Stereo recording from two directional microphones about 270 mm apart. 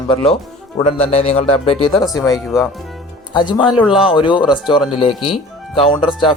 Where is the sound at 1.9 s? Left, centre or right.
Centre.